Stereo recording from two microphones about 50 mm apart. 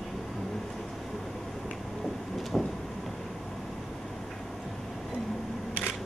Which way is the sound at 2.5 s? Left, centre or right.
Centre.